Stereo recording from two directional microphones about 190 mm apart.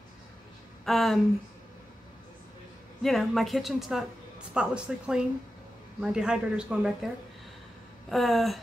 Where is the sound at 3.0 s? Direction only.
Centre (ahead or behind).